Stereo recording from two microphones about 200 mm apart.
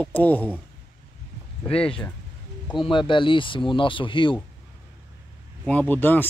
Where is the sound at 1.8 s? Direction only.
5° left (ahead or behind).